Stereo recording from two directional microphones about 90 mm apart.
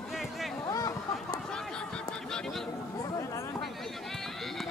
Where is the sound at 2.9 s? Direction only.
40° left (ahead or behind).